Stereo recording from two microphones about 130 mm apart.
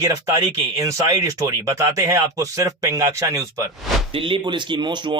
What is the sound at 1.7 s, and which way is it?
Speech, 25° right (ahead or behind).